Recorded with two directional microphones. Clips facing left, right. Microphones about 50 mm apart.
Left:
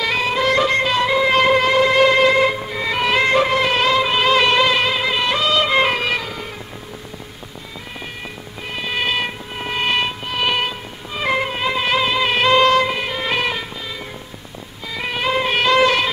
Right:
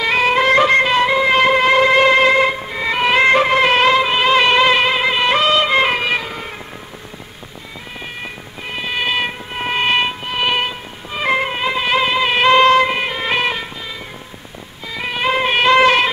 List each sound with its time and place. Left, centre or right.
0.2 s music: right
4.0 s music: centre; by 5.6 s right
5.6 s music: centre
8.7 s cat: centre
9.5 s music: right; by 15.2 s centre
15.2 s shofar: right